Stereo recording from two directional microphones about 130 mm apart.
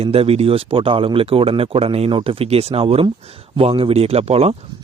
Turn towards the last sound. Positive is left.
turn(degrees=-55)  # may be behind; listen again after turning